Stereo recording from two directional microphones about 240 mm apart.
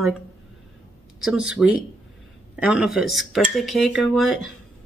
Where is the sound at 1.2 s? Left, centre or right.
Centre.